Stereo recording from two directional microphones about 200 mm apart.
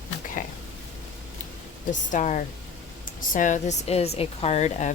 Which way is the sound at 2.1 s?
40° left (ahead or behind).